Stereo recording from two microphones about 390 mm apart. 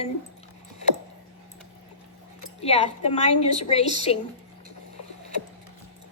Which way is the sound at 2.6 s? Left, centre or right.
Centre.